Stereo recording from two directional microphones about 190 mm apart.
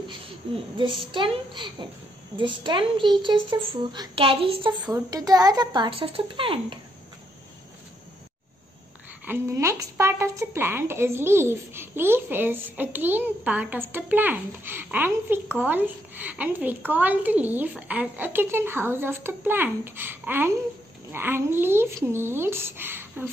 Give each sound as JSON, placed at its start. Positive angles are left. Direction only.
{"t": 1.1, "sound": "a woman's voice", "side_deg": -25}
{"t": 4.8, "sound": "a woman's voice", "side_deg": -15}
{"t": 9.2, "sound": "a woman's voice", "side_deg": -10}